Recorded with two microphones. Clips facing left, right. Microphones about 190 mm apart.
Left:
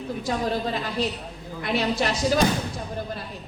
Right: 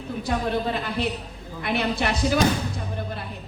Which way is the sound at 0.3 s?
60° right (ahead or behind).